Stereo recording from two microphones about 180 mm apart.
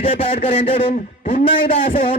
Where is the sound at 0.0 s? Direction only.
30° left (ahead or behind).